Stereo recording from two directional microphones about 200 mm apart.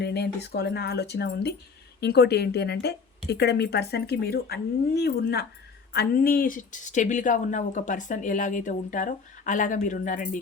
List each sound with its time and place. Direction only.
0.0 s speech: 55° left (ahead or behind)